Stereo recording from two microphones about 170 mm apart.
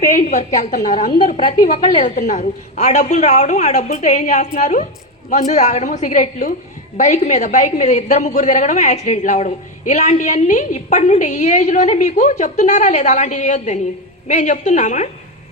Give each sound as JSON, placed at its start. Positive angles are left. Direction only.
{"t": 0.0, "sound": "a woman's voice", "side_deg": 45}
{"t": 1.2, "sound": "a woman's voice", "side_deg": 30}
{"t": 2.0, "sound": "a woman's voice", "side_deg": 45}